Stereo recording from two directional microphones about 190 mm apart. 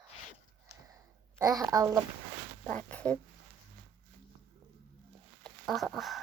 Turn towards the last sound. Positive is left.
turn(degrees=0)  # may be behind; listen again after turning